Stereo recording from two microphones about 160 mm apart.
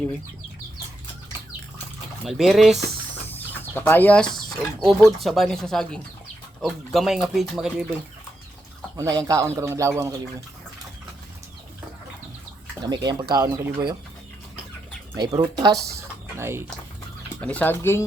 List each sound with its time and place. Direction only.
2.2 s speech: centre (ahead or behind)
3.2 s chicken: 10° left (ahead or behind)
4.8 s speech: centre (ahead or behind)
9.0 s speech: 20° right (ahead or behind)
12.8 s speech: 25° right (ahead or behind)
15.3 s speech: 25° right (ahead or behind)
17.4 s speech: 10° left (ahead or behind)